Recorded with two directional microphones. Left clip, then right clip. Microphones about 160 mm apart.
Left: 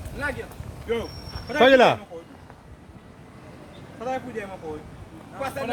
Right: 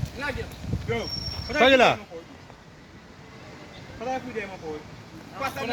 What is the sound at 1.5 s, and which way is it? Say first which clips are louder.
Speech: left 2 dB; 45° left (ahead or behind).